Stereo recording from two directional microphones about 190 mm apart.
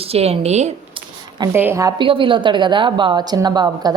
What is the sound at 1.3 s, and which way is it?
A woman's voice, 20° right (ahead or behind).